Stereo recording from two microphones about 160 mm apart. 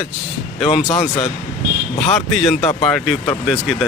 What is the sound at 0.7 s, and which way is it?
Speech, 35° left (ahead or behind).